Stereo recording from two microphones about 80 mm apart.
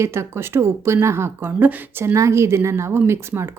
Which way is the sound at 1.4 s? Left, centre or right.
Right.